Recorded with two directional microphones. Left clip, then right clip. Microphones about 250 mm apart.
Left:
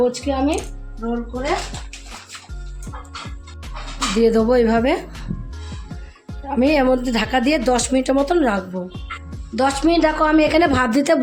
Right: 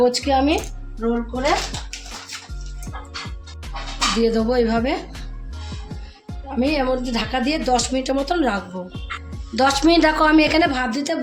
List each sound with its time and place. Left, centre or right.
0.0 s speech: centre
0.6 s speech: centre
4.2 s speech: left
6.5 s a woman's voice: left
8.9 s speech: centre
10.6 s a woman's voice: left